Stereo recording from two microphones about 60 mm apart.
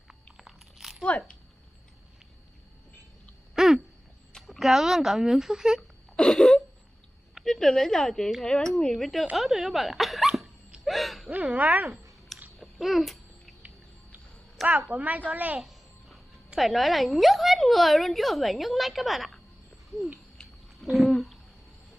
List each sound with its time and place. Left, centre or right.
0.1 s crunch: centre
1.0 s speech: centre
3.5 s a sound: centre
4.4 s speech: centre
5.8 s wail: centre
7.4 s speech: centre
10.8 s a sound: centre
11.2 s speech: right
12.5 s babbling: centre
14.9 s speech: right
16.5 s a woman's voice: centre
20.9 s a sound: centre